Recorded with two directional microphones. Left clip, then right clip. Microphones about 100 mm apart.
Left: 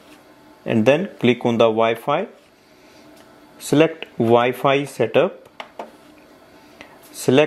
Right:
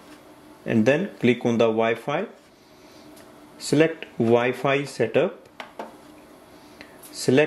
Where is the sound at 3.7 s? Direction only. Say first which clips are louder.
Left 4 dB; 30° left (ahead or behind).